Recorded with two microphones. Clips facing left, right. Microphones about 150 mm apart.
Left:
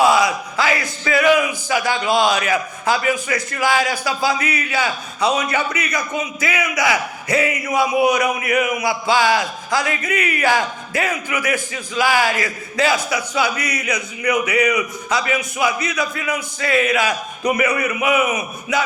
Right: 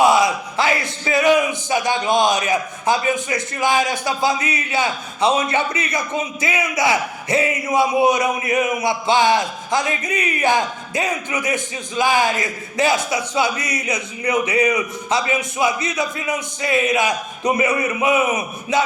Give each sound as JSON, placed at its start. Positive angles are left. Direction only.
{"t": 0.0, "sound": "a man's voice", "side_deg": -25}